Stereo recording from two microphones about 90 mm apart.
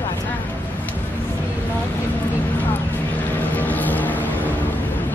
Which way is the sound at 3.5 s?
20° left (ahead or behind).